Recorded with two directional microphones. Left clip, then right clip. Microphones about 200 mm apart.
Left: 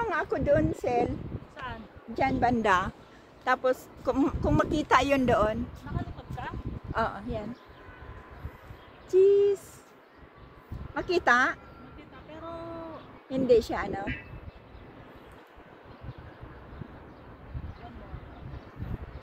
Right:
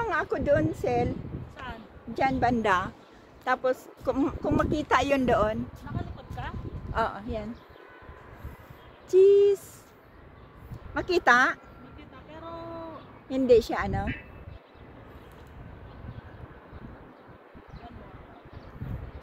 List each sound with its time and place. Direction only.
0.0 s a woman's voice: centre (ahead or behind)
6.4 s a sound: 30° right (ahead or behind)
6.9 s speech: 5° right (ahead or behind)
9.1 s speech: 40° right (ahead or behind)
11.0 s a woman's voice: 30° right (ahead or behind)
12.3 s vehicle: 30° right (ahead or behind)
13.3 s a woman's voice: 30° right (ahead or behind)